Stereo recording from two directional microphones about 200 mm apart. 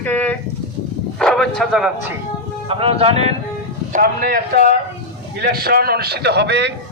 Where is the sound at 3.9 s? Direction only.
45° right (ahead or behind).